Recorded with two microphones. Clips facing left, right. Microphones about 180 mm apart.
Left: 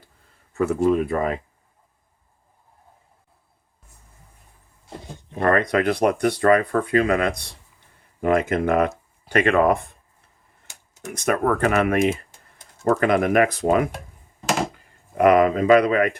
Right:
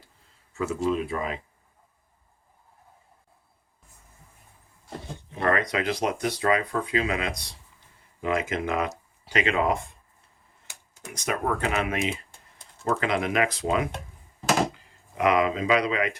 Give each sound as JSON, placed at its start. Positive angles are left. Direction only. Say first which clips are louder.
{"t": 0.5, "sound": "speech", "louder": "left 7 dB", "side_deg": 55}
{"t": 5.3, "sound": "speech", "louder": "left 6 dB", "side_deg": 45}
{"t": 10.2, "sound": "tick-tock", "louder": "left 1 dB", "side_deg": 55}
{"t": 12.8, "sound": "speech", "louder": "left 7 dB", "side_deg": 50}
{"t": 15.1, "sound": "speech", "louder": "left 7 dB", "side_deg": 55}